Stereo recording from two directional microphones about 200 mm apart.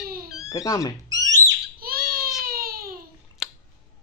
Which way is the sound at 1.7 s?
50° right (ahead or behind).